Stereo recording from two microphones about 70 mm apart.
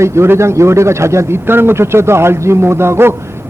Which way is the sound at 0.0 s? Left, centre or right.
Right.